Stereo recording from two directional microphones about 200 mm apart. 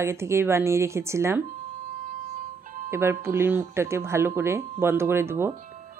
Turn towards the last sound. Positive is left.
turn(degrees=-10)  # may be behind; listen again after turning